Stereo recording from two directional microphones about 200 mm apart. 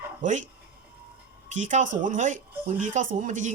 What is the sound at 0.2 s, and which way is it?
Speech, 40° right (ahead or behind).